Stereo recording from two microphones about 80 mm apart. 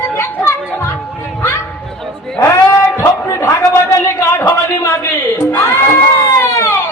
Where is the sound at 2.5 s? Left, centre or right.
Left.